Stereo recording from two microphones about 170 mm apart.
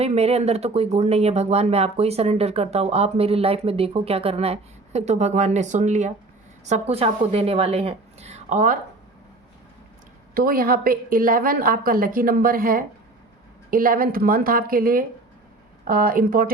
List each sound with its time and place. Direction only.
0.0 s speech: 40° right (ahead or behind)
10.3 s a woman's voice: 60° right (ahead or behind)